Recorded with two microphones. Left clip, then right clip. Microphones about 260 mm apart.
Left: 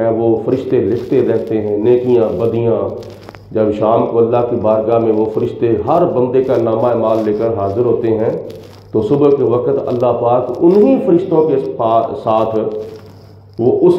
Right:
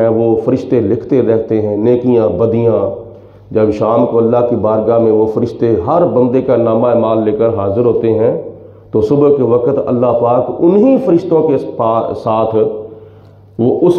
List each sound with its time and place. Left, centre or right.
0.0 s a man's voice: right